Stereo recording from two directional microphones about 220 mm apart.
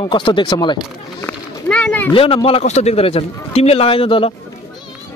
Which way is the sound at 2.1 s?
25° left (ahead or behind).